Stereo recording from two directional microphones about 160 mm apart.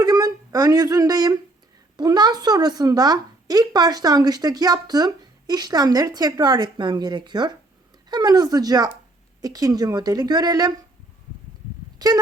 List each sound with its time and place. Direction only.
0.0 s speech: 25° right (ahead or behind)
11.9 s speech: 25° right (ahead or behind)